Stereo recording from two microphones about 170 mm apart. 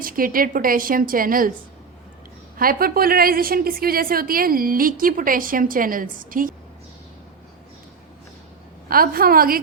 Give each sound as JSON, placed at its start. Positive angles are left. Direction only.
{"t": 0.0, "sound": "a woman's voice", "side_deg": -55}
{"t": 2.6, "sound": "a woman's voice", "side_deg": -60}
{"t": 8.9, "sound": "a woman's voice", "side_deg": -60}